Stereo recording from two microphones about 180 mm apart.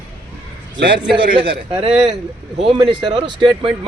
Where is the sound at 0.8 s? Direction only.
70° right (ahead or behind).